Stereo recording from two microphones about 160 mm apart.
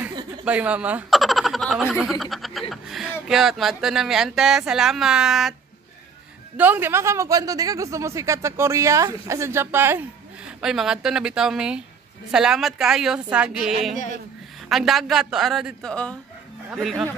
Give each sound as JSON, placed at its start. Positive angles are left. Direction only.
{"t": 0.5, "sound": "speech", "side_deg": -10}
{"t": 6.5, "sound": "a man's voice", "side_deg": -10}
{"t": 10.6, "sound": "speech", "side_deg": -5}
{"t": 13.9, "sound": "speech", "side_deg": 45}
{"t": 14.7, "sound": "speech", "side_deg": 0}